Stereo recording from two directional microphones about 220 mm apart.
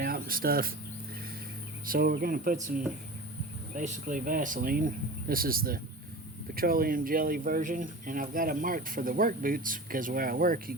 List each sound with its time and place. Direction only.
0.0 s cricket: 40° right (ahead or behind)
1.9 s speech: 40° right (ahead or behind)